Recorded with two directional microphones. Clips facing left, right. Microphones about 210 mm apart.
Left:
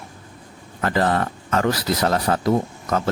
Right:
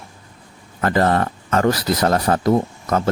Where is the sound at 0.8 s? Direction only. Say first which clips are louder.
Right 3 dB; 45° right (ahead or behind).